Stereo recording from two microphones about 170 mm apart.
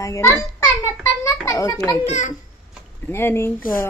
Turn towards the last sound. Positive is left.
turn(degrees=15)  # may be behind; listen again after turning